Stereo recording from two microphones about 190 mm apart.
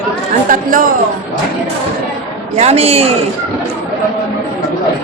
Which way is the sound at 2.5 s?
35° right (ahead or behind).